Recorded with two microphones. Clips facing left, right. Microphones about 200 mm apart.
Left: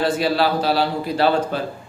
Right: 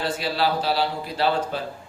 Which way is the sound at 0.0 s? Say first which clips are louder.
Left 6 dB; 55° left (ahead or behind).